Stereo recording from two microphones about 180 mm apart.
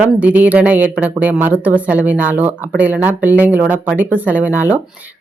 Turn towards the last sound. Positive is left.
turn(degrees=-10)  # may be behind; listen again after turning